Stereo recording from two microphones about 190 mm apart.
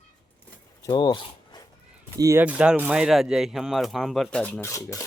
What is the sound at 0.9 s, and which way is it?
Speech, 25° left (ahead or behind).